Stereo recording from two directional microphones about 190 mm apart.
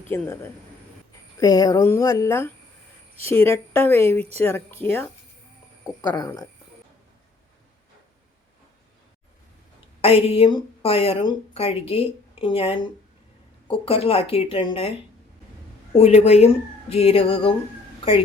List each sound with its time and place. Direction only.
0.1 s speech: 10° left (ahead or behind)
10.0 s speech: 30° left (ahead or behind)
16.0 s speech: 35° left (ahead or behind)